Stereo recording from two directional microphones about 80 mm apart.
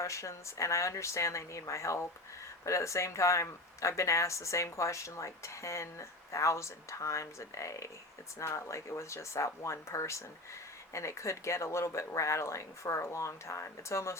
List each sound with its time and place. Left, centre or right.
0.0 s speech: left